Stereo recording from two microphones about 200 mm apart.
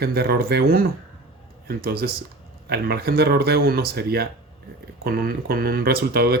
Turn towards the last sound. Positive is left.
turn(degrees=-50)  # may be behind; listen again after turning